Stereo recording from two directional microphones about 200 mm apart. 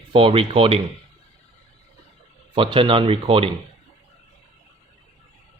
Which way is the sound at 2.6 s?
25° right (ahead or behind).